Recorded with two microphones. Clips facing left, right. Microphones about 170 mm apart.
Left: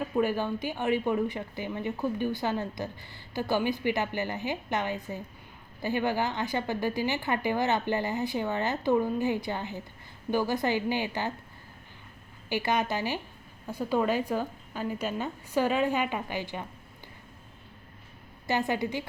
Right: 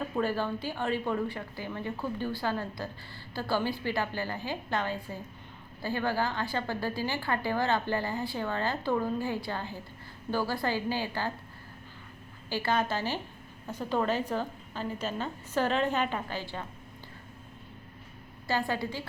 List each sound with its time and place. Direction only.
0.2 s a woman's voice: 15° left (ahead or behind)
12.5 s a woman's voice: 15° left (ahead or behind)
18.4 s a woman's voice: 20° left (ahead or behind)